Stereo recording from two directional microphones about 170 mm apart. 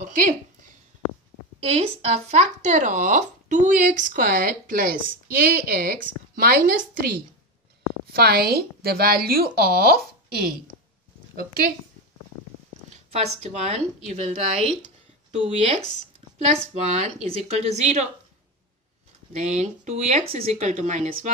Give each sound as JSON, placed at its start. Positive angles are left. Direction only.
{"t": 0.0, "sound": "a sound", "side_deg": -50}
{"t": 1.6, "sound": "speech", "side_deg": -35}
{"t": 8.1, "sound": "speech", "side_deg": -65}
{"t": 11.3, "sound": "speech", "side_deg": -60}
{"t": 12.9, "sound": "a woman's voice", "side_deg": -40}
{"t": 16.8, "sound": "a woman's voice", "side_deg": -40}
{"t": 19.3, "sound": "speech", "side_deg": -45}